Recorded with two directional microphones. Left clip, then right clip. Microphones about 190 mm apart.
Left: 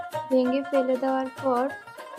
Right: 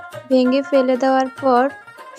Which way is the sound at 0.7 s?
40° right (ahead or behind).